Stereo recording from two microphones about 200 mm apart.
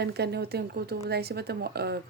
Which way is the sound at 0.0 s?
55° right (ahead or behind).